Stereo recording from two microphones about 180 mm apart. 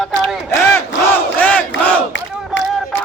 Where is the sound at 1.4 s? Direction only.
10° left (ahead or behind).